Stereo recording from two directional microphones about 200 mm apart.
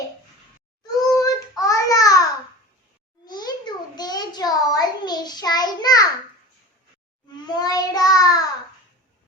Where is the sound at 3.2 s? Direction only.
20° left (ahead or behind).